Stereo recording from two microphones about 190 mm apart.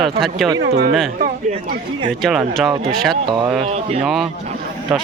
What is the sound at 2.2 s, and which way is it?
Speech, centre (ahead or behind).